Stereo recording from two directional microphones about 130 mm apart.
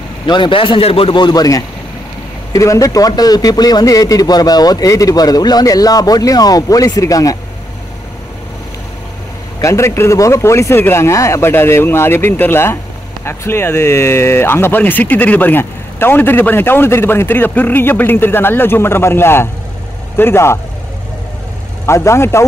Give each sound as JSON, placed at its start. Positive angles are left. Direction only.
{"t": 0.3, "sound": "a man's voice", "side_deg": 40}
{"t": 9.6, "sound": "a man's voice", "side_deg": 25}
{"t": 21.8, "sound": "a man's voice", "side_deg": 20}